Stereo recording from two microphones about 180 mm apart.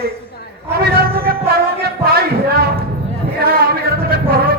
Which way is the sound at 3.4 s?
55° right (ahead or behind).